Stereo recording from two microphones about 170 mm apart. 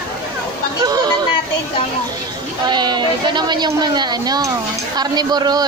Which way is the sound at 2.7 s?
25° right (ahead or behind).